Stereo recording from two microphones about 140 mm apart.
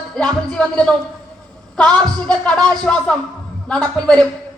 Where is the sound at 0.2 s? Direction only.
5° left (ahead or behind).